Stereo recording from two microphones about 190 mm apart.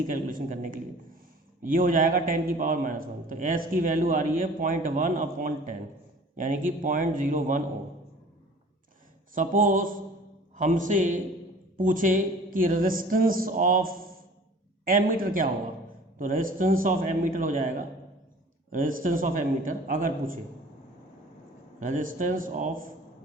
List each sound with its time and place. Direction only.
0.1 s a man's voice: 45° right (ahead or behind)
9.3 s a man's voice: 45° right (ahead or behind)
21.8 s a man's voice: 45° right (ahead or behind)